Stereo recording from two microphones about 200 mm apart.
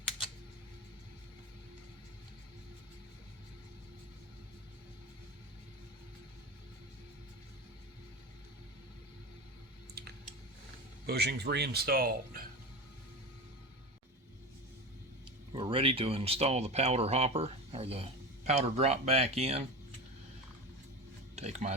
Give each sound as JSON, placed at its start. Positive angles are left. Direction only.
{"t": 10.0, "sound": "a sound", "side_deg": -55}
{"t": 11.0, "sound": "speech", "side_deg": -55}
{"t": 15.5, "sound": "speech", "side_deg": -25}
{"t": 21.3, "sound": "speech", "side_deg": -35}